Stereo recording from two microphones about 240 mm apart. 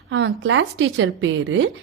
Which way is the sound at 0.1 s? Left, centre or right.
Right.